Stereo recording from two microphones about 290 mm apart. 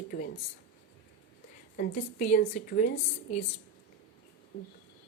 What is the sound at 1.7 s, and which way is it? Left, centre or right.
A woman's voice, left.